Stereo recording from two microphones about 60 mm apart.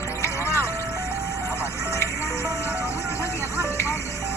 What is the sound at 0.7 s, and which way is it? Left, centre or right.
Music, right.